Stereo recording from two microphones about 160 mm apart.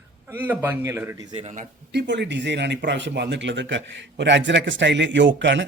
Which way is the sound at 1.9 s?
90° right.